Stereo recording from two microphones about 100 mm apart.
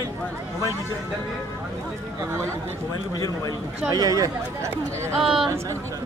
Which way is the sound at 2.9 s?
40° left (ahead or behind).